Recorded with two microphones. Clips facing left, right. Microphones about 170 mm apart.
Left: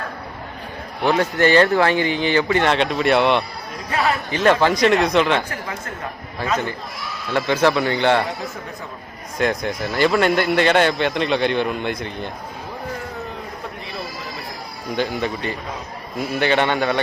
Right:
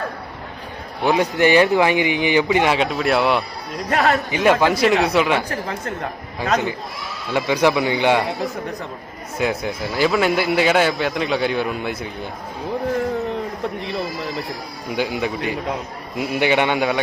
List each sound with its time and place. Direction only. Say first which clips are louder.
1.0 s speech: right 1 dB; 15° right (ahead or behind)
2.7 s speech: left 1 dB; centre (ahead or behind)
3.8 s a man's voice: right 3 dB; 45° right (ahead or behind)
4.3 s speech: even; 10° right (ahead or behind)
7.3 s speech: even; 10° right (ahead or behind)
9.4 s speech: left 1 dB; 5° right (ahead or behind)
14.9 s speech: even; 10° right (ahead or behind)